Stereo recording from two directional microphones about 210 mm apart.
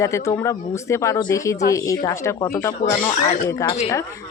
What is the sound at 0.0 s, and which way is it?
Speech, 15° left (ahead or behind).